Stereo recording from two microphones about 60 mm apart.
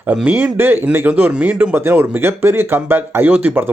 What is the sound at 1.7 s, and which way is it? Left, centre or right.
Speech, right.